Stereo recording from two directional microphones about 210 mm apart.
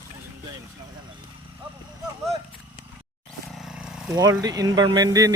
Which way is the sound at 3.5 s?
Centre (ahead or behind).